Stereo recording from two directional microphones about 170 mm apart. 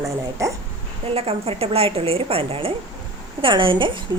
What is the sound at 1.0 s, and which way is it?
A woman's voice, 35° right (ahead or behind).